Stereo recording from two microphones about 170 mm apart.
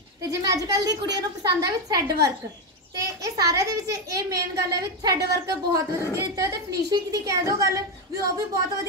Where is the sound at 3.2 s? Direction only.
20° right (ahead or behind).